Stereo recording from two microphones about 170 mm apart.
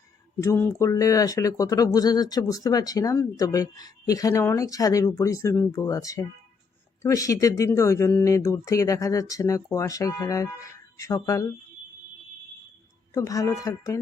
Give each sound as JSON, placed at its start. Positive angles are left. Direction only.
{"t": 0.3, "sound": "speech", "side_deg": 15}
{"t": 13.1, "sound": "speech", "side_deg": 20}